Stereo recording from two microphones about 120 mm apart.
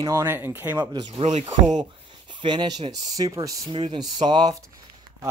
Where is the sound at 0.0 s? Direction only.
25° right (ahead or behind).